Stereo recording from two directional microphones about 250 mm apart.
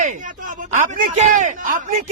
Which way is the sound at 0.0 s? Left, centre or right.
Right.